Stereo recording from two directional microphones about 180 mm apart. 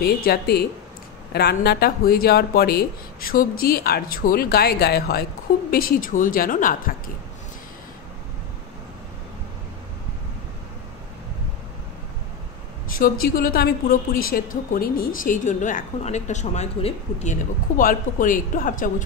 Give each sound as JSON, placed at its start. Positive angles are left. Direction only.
{"t": 0.0, "sound": "a woman's voice", "side_deg": 60}
{"t": 12.9, "sound": "a woman's voice", "side_deg": 50}